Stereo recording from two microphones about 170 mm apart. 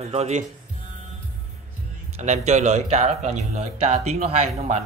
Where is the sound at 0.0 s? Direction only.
40° right (ahead or behind).